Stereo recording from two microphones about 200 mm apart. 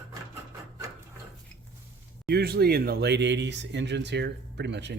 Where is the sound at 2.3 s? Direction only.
50° right (ahead or behind).